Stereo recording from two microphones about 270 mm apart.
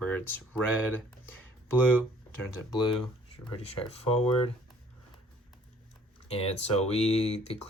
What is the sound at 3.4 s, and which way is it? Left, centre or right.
Speech, centre.